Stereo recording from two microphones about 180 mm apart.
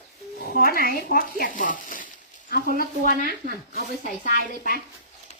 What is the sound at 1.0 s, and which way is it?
Speech, 55° left (ahead or behind).